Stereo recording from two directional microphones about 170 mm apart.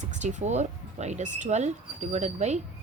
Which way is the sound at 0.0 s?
45° right (ahead or behind).